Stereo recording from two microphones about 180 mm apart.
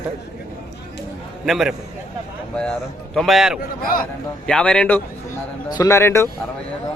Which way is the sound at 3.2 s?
Centre (ahead or behind).